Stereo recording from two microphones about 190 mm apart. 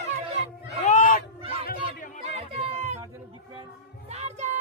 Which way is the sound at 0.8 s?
45° left (ahead or behind).